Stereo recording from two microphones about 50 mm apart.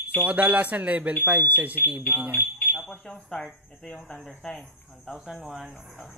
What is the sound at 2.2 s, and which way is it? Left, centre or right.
Speech, right.